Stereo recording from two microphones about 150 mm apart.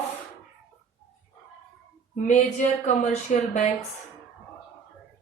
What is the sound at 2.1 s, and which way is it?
Speech, 55° left (ahead or behind).